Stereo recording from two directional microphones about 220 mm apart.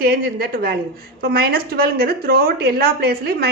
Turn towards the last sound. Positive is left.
turn(degrees=-45)  # may be behind; listen again after turning